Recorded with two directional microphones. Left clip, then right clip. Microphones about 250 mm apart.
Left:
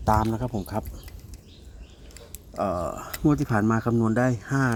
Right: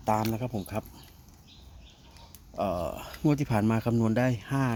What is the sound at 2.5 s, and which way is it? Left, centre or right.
Speech, centre.